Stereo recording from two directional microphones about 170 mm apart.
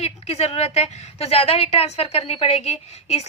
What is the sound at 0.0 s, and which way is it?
A woman's voice, 35° left (ahead or behind).